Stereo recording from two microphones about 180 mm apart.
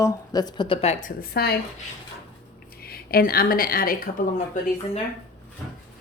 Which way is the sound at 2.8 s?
60° left (ahead or behind).